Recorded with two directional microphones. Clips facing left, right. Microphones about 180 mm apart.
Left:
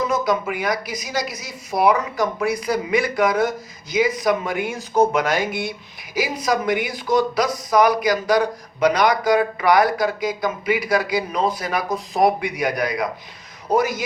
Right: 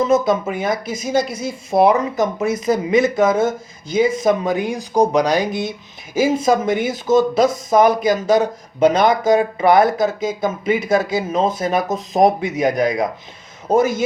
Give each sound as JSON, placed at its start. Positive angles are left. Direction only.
{"t": 0.0, "sound": "speech", "side_deg": -25}